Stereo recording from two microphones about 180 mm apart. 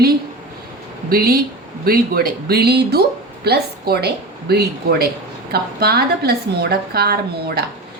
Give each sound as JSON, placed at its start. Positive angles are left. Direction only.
{"t": 1.1, "sound": "a woman's voice", "side_deg": -55}